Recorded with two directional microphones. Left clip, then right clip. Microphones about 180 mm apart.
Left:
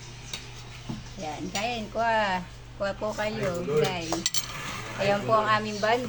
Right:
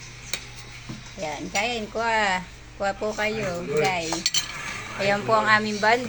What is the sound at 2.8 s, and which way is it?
Speech, 10° right (ahead or behind).